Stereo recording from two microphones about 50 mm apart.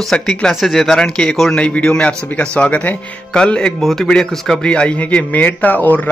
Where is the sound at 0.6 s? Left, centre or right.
Centre.